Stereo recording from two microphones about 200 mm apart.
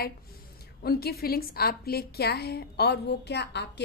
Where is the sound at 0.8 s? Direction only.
50° left (ahead or behind).